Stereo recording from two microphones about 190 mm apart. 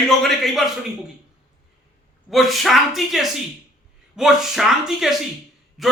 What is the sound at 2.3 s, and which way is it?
Speech, centre (ahead or behind).